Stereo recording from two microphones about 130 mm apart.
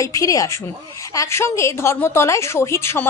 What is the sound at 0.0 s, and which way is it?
A woman's voice, 25° left (ahead or behind).